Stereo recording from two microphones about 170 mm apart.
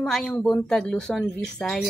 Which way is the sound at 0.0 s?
5° left (ahead or behind).